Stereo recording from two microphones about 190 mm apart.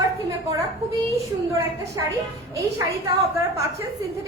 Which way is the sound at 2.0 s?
20° right (ahead or behind).